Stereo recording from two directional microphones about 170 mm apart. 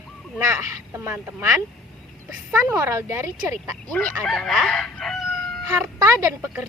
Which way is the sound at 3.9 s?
5° left (ahead or behind).